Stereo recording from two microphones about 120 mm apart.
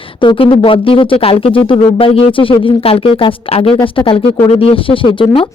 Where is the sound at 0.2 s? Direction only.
45° left (ahead or behind).